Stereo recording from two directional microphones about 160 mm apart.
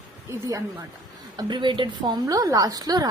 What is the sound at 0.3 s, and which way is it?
A woman's voice, 20° right (ahead or behind).